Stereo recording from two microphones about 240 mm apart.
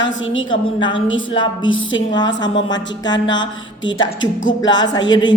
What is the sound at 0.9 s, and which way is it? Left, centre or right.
A woman's voice, left.